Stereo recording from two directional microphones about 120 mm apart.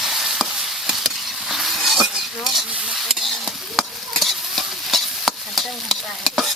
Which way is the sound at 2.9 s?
Centre (ahead or behind).